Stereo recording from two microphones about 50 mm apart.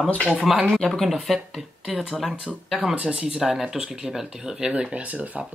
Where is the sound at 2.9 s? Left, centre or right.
Right.